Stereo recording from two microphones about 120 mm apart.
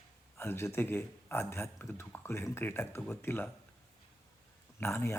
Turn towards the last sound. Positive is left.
turn(degrees=20)  # may be behind; listen again after turning